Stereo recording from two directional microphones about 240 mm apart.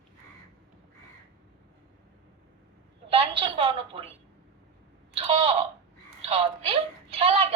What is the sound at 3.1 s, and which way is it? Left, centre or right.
A woman's voice, right.